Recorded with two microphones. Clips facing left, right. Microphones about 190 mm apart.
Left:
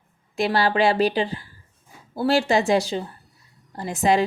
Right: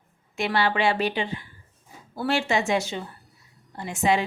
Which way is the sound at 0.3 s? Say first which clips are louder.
Left 4 dB; 35° left (ahead or behind).